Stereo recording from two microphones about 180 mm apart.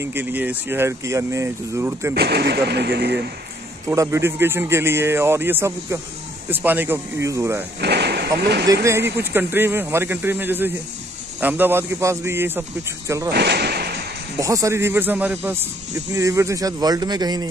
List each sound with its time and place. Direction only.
0.0 s speech: 10° right (ahead or behind)
2.1 s speech: 65° right (ahead or behind)
3.9 s speech: 15° right (ahead or behind)
7.8 s a sound: 65° right (ahead or behind)
8.8 s speech: 15° right (ahead or behind)
13.3 s a sound: 65° right (ahead or behind)
14.4 s speech: 15° right (ahead or behind)